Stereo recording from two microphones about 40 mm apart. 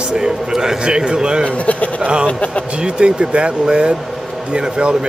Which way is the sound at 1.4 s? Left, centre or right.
Left.